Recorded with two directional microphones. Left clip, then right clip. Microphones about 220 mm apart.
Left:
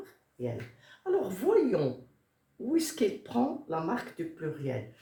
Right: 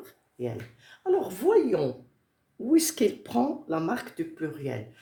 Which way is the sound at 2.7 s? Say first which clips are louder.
Right 6 dB; 50° right (ahead or behind).